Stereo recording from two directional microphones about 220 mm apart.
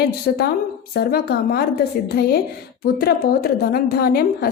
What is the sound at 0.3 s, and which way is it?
A woman's voice, 45° left (ahead or behind).